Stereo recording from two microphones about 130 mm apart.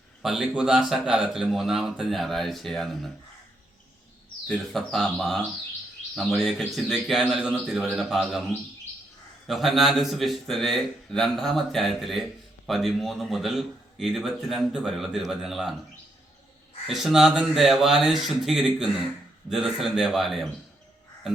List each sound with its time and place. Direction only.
0.2 s a man's voice: 5° right (ahead or behind)
4.4 s a man's voice: 5° left (ahead or behind)
9.5 s a man's voice: centre (ahead or behind)
16.8 s a man's voice: centre (ahead or behind)